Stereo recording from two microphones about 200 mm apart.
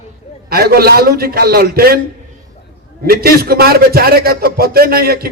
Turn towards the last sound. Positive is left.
turn(degrees=-50)  # may be behind; listen again after turning